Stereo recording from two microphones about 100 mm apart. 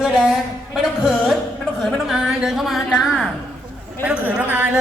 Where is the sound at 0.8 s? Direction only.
5° right (ahead or behind).